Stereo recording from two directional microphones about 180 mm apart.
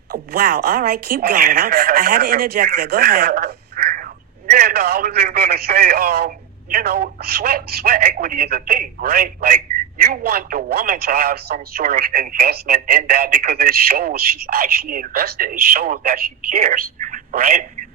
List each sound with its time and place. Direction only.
0.1 s speech: 55° right (ahead or behind)
4.6 s speech: 60° right (ahead or behind)